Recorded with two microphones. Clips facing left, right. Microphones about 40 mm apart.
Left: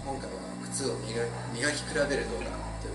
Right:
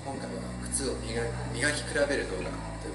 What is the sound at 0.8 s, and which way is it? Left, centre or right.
A man's voice, centre.